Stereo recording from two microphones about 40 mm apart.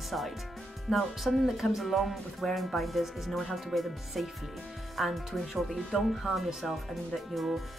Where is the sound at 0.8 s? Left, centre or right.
Centre.